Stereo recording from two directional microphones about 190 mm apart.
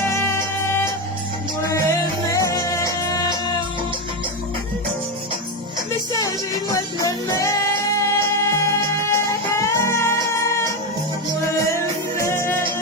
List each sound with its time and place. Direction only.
0.1 s music: 15° left (ahead or behind)
6.1 s music: 20° left (ahead or behind)
11.7 s music: 15° left (ahead or behind)